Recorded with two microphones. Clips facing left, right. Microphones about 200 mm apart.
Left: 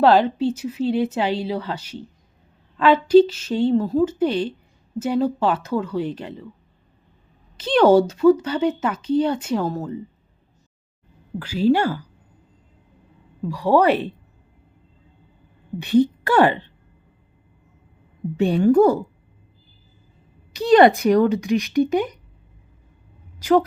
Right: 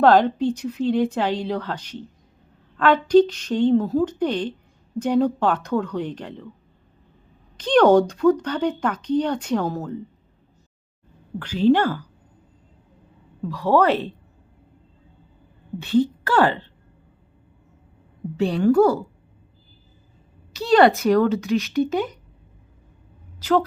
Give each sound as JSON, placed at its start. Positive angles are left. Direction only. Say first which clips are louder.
{"t": 0.0, "sound": "speech", "louder": "even", "side_deg": 5}
{"t": 7.5, "sound": "speech", "louder": "even", "side_deg": 5}
{"t": 11.3, "sound": "speech", "louder": "right 1 dB", "side_deg": 10}
{"t": 13.5, "sound": "speech", "louder": "left 1 dB", "side_deg": 15}
{"t": 15.8, "sound": "a woman's voice", "louder": "left 2 dB", "side_deg": 20}
{"t": 18.4, "sound": "speech", "louder": "left 2 dB", "side_deg": 5}
{"t": 18.7, "sound": "a woman's voice", "louder": "left 1 dB", "side_deg": 20}
{"t": 20.5, "sound": "speech", "louder": "left 2 dB", "side_deg": 15}
{"t": 23.4, "sound": "speech", "louder": "left 3 dB", "side_deg": 10}